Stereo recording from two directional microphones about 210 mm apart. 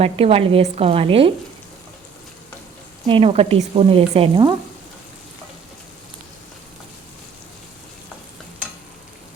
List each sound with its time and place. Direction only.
0.0 s speech: 30° right (ahead or behind)
3.1 s speech: 30° right (ahead or behind)